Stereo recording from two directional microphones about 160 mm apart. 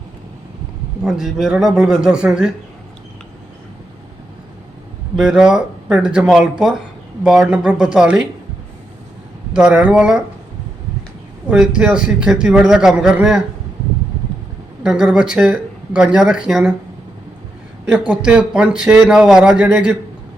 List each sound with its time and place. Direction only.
1.0 s a man's voice: 5° right (ahead or behind)
5.1 s a man's voice: 5° right (ahead or behind)
9.5 s a man's voice: 5° right (ahead or behind)
11.5 s a man's voice: 5° right (ahead or behind)
14.8 s a man's voice: 5° right (ahead or behind)
17.8 s a man's voice: 5° right (ahead or behind)